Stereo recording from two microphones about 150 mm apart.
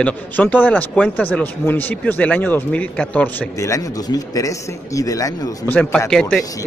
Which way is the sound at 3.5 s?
20° left (ahead or behind).